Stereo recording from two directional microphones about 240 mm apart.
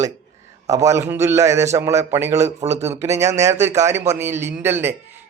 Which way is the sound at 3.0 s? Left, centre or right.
Centre.